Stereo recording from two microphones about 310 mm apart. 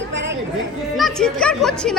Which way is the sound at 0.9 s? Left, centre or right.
Centre.